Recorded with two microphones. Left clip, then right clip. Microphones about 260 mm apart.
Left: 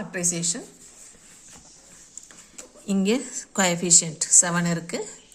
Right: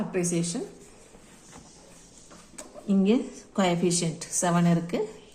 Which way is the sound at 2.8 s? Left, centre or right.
Left.